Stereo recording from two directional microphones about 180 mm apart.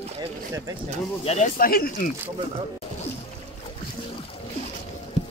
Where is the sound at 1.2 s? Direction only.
35° left (ahead or behind).